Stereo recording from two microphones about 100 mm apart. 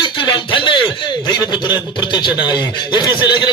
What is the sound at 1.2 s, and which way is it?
A man's voice, 45° left (ahead or behind).